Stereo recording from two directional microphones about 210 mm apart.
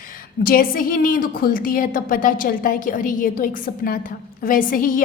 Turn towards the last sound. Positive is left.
turn(degrees=40)  # may be behind; listen again after turning